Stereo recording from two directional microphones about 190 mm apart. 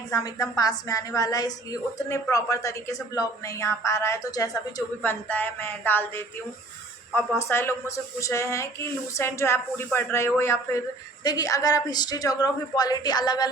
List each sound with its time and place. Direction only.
0.1 s a woman's voice: 20° left (ahead or behind)
7.3 s speech: 15° left (ahead or behind)